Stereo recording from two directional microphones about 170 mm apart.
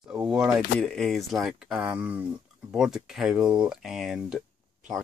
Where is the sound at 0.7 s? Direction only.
5° left (ahead or behind).